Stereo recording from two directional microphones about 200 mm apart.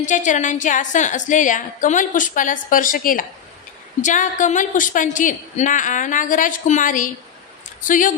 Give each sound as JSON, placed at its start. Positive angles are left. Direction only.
{"t": 0.0, "sound": "a woman's voice", "side_deg": 35}